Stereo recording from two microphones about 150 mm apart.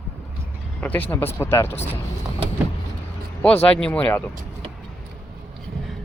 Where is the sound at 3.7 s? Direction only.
10° left (ahead or behind).